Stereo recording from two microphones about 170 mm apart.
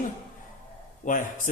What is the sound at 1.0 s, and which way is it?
Speech, 45° left (ahead or behind).